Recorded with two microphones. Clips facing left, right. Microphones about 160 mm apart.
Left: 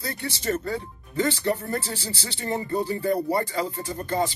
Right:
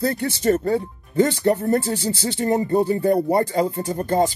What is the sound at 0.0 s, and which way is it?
Speech, 55° right (ahead or behind).